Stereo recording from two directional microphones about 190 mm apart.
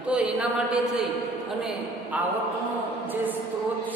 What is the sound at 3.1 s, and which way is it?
Speech, 10° right (ahead or behind).